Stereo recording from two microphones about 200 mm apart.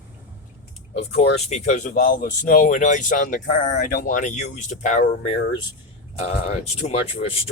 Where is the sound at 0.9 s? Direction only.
30° left (ahead or behind).